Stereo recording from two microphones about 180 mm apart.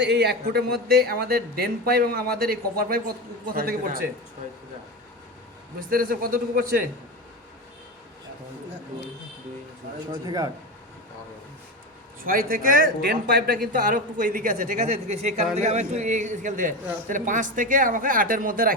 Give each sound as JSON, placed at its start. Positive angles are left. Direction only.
{"t": 0.0, "sound": "speech", "side_deg": -65}
{"t": 5.9, "sound": "a man's voice", "side_deg": -50}
{"t": 10.1, "sound": "a man's voice", "side_deg": -20}
{"t": 12.2, "sound": "a man's voice", "side_deg": -50}